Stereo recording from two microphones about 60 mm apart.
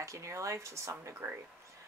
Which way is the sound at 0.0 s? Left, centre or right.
Right.